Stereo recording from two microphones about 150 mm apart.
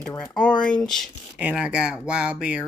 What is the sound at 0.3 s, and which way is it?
Speech, 5° left (ahead or behind).